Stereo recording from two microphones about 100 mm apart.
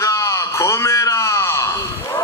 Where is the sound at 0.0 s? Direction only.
35° left (ahead or behind).